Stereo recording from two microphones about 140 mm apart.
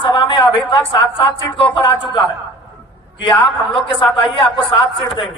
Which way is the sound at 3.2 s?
35° left (ahead or behind).